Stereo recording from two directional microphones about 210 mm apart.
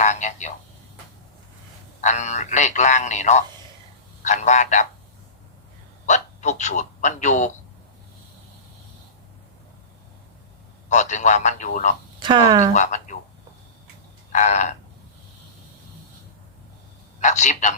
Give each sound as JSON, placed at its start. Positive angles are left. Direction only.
{"t": 0.0, "sound": "a sound", "side_deg": 35}
{"t": 2.0, "sound": "a man's voice", "side_deg": 35}
{"t": 6.1, "sound": "a man's voice", "side_deg": 35}
{"t": 10.8, "sound": "a man's voice", "side_deg": 35}
{"t": 12.2, "sound": "speech", "side_deg": -20}
{"t": 12.7, "sound": "a man's voice", "side_deg": 35}
{"t": 14.3, "sound": "a man's voice", "side_deg": 35}
{"t": 17.2, "sound": "a man's voice", "side_deg": 35}